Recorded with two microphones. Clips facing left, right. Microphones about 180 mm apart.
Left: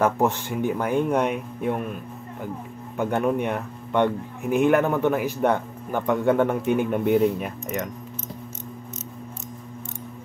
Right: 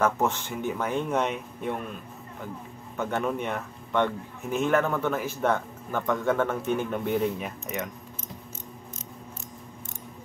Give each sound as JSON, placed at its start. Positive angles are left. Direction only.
{"t": 0.0, "sound": "speech", "side_deg": 15}
{"t": 3.0, "sound": "speech", "side_deg": 10}
{"t": 7.3, "sound": "speech", "side_deg": 0}